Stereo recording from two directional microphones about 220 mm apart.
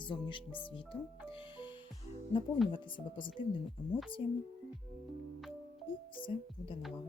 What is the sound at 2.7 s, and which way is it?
Speech, 20° left (ahead or behind).